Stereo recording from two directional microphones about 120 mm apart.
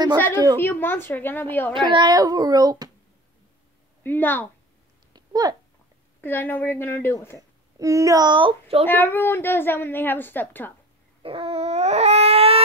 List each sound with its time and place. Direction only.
0.6 s a woman's voice: 15° left (ahead or behind)
1.7 s a child's voice: 45° right (ahead or behind)
4.0 s a woman's voice: 15° left (ahead or behind)
5.1 s a sound: 35° right (ahead or behind)
6.2 s a woman's voice: 15° left (ahead or behind)
7.8 s a child's voice: 25° right (ahead or behind); by 8.8 s 50° right (ahead or behind)
8.8 s a woman's voice: 15° left (ahead or behind)
11.2 s dog: 55° right (ahead or behind)